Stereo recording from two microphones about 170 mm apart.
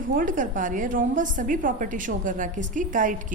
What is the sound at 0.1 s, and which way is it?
A woman's voice, 50° right (ahead or behind).